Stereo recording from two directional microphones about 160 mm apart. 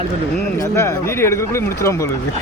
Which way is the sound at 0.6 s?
20° left (ahead or behind).